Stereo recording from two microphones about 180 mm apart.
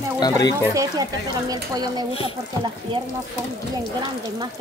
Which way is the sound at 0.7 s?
20° right (ahead or behind).